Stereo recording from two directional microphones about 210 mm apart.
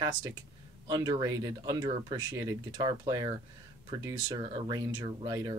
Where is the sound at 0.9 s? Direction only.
20° right (ahead or behind).